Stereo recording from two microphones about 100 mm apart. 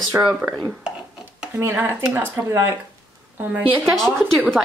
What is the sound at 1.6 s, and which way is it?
Speech, 20° right (ahead or behind).